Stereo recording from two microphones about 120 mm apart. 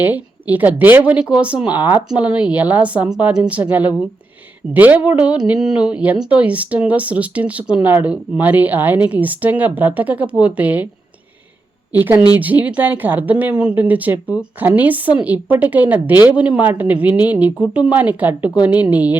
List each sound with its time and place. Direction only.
0.0 s speech: 15° right (ahead or behind)
11.9 s speech: 15° right (ahead or behind)